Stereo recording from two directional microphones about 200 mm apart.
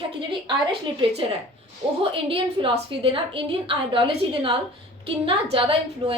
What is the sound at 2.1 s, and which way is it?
A woman's voice, 25° right (ahead or behind).